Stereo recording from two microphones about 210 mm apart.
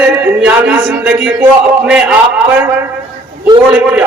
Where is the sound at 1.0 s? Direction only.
10° right (ahead or behind).